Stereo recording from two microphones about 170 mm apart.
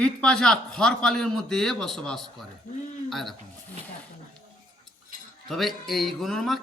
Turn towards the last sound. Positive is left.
turn(degrees=0)  # may be behind; listen again after turning